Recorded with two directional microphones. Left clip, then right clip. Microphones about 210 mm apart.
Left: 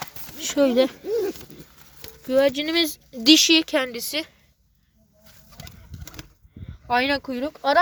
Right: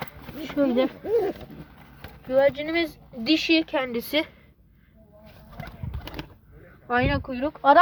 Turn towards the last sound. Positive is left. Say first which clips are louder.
# right 3 dB
turn(degrees=30)  # may be behind; listen again after turning